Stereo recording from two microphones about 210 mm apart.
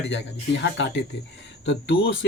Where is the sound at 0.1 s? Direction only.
60° left (ahead or behind).